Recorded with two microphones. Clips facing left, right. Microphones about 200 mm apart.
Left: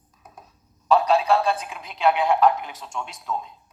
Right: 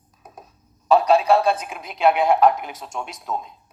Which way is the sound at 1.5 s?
45° right (ahead or behind).